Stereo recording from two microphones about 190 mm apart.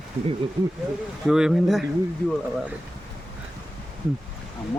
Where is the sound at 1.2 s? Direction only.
Centre (ahead or behind).